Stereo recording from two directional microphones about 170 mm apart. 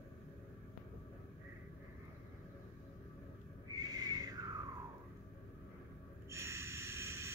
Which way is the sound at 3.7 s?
20° right (ahead or behind).